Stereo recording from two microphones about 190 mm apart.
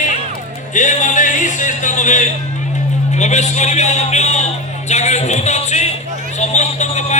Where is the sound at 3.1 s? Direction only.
35° left (ahead or behind).